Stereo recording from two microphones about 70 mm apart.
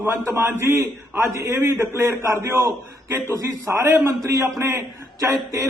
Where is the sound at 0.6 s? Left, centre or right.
Right.